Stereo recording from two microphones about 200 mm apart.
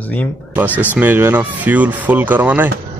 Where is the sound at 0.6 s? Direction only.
10° right (ahead or behind).